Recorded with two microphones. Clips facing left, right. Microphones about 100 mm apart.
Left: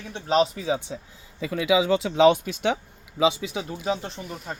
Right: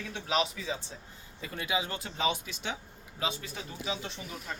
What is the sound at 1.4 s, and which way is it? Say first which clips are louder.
Speech: left 12 dB; 90° left.